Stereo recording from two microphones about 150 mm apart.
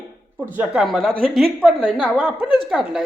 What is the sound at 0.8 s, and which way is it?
A man's voice, centre (ahead or behind).